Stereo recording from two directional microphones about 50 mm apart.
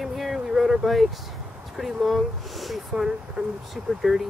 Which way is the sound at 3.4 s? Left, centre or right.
Right.